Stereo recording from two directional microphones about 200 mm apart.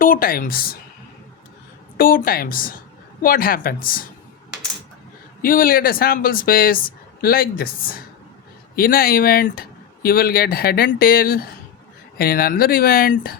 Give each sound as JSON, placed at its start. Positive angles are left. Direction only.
{"t": 0.0, "sound": "speech", "side_deg": 45}
{"t": 2.0, "sound": "speech", "side_deg": 45}
{"t": 5.4, "sound": "speech", "side_deg": 45}